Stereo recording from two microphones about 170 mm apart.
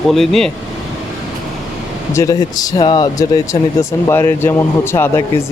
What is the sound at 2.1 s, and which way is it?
Speech, 20° left (ahead or behind).